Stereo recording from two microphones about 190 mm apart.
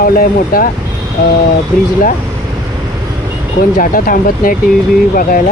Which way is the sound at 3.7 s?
45° left (ahead or behind).